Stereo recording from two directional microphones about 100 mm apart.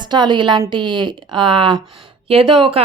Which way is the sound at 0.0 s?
50° right (ahead or behind).